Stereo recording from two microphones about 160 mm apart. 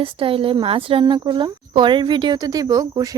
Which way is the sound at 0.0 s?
35° right (ahead or behind).